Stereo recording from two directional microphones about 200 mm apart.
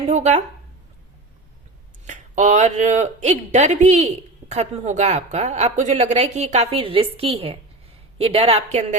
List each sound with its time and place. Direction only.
0.0 s speech: 35° right (ahead or behind)
2.0 s speech: 35° right (ahead or behind)